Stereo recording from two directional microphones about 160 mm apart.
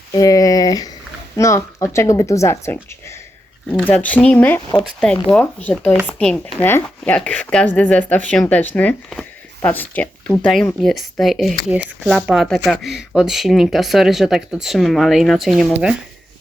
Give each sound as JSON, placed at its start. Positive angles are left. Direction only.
{"t": 0.1, "sound": "speech", "side_deg": 20}
{"t": 3.7, "sound": "speech", "side_deg": 5}